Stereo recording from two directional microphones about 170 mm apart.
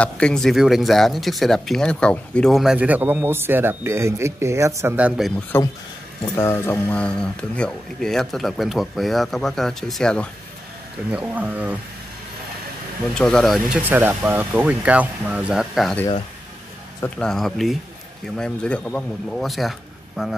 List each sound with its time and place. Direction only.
0.0 s speech: 5° left (ahead or behind)
5.5 s speech: 15° left (ahead or behind)
11.1 s speech: 10° right (ahead or behind)
13.1 s speech: 5° left (ahead or behind)
17.0 s speech: 5° left (ahead or behind)